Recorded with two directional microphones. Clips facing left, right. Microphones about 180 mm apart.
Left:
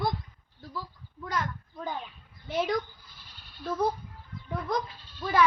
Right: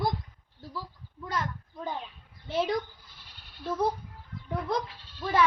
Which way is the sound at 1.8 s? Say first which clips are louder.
Even; 10° right (ahead or behind).